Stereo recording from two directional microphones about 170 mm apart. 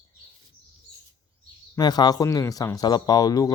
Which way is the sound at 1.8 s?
25° left (ahead or behind).